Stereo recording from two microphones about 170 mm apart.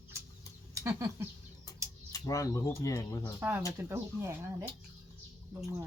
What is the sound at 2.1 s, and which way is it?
Speech, 20° left (ahead or behind).